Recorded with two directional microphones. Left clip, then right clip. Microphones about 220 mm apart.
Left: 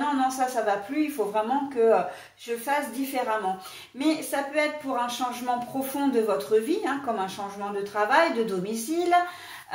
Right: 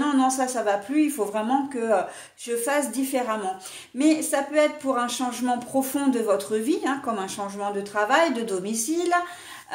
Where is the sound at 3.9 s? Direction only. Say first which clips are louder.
Right 4 dB; 45° right (ahead or behind).